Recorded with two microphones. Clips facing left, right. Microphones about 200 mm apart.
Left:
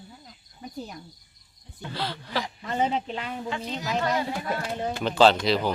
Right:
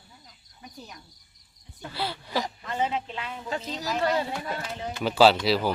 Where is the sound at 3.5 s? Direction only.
35° right (ahead or behind).